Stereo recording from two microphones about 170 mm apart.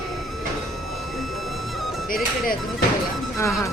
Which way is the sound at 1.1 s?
Centre (ahead or behind).